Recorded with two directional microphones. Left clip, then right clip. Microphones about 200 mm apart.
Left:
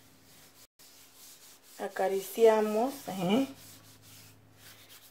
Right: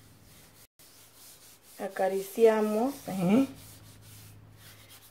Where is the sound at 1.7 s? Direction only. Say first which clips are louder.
Right 1 dB; 20° left (ahead or behind).